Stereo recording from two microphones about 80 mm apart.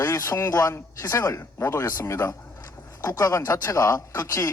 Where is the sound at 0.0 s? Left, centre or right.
Left.